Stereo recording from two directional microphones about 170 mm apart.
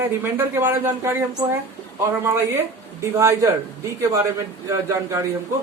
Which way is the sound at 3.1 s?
20° right (ahead or behind).